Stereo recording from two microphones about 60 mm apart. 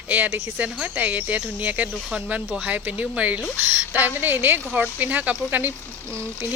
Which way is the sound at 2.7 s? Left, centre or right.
Right.